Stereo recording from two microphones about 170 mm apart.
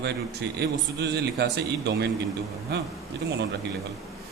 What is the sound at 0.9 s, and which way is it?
A man's voice, 75° right (ahead or behind).